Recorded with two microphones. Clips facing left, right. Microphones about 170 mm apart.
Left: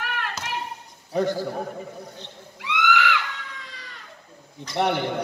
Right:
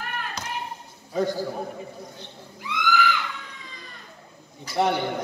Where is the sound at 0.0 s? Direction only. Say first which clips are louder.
Left 2 dB; 80° left.